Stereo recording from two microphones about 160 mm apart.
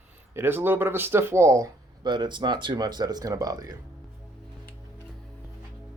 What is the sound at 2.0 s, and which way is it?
Speech, 30° right (ahead or behind).